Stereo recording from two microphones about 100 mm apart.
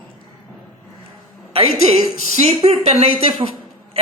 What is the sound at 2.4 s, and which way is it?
Speech, 90° right.